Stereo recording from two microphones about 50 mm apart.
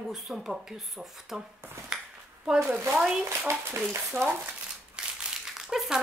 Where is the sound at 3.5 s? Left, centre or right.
Right.